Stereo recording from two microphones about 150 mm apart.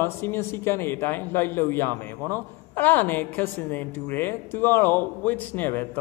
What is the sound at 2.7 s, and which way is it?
A man's voice, 10° left (ahead or behind).